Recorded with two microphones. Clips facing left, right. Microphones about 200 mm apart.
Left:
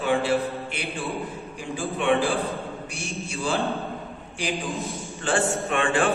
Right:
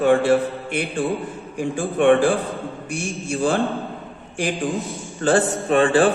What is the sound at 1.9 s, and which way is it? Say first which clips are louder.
Speech: right 8 dB; 50° right (ahead or behind).